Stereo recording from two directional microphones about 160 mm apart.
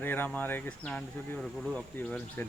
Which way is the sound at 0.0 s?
10° left (ahead or behind).